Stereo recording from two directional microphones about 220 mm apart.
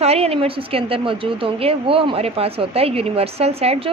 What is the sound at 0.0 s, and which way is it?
A woman's voice, 25° right (ahead or behind).